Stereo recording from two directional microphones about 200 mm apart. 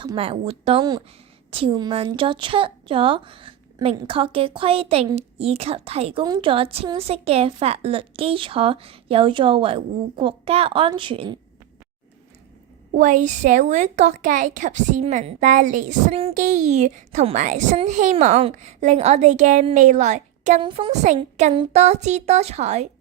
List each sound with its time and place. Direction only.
0.0 s a woman's voice: 25° right (ahead or behind)
13.0 s a woman's voice: 40° right (ahead or behind)
20.6 s a woman's voice: 25° right (ahead or behind)
21.5 s a woman's voice: 25° right (ahead or behind)
21.8 s a woman's voice: 35° right (ahead or behind)